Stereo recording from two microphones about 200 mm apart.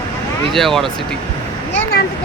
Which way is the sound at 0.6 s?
Centre (ahead or behind).